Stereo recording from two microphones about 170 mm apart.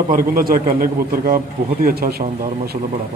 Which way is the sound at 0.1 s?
60° right (ahead or behind).